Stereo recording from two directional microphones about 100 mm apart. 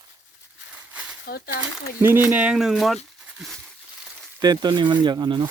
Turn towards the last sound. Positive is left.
turn(degrees=-50)  # may be behind; listen again after turning